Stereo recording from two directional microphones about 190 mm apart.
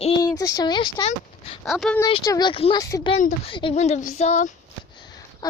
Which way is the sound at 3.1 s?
30° left (ahead or behind).